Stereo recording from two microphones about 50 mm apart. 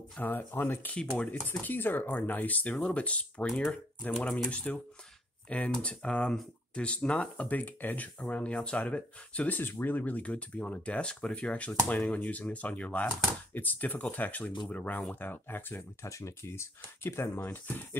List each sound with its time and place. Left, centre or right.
0.2 s speech: left
1.1 s speech: left
4.2 s speech: centre
4.5 s speech: left
9.6 s speech: left
16.0 s speech: left
17.0 s speech: left
17.4 s speech: left